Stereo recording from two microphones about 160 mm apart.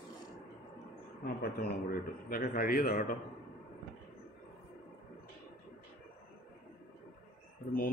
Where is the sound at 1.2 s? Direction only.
65° left (ahead or behind).